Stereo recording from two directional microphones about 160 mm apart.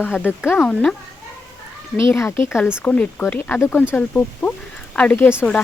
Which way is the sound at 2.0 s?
15° left (ahead or behind).